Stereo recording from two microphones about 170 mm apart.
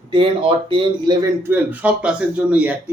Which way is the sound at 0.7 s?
25° right (ahead or behind).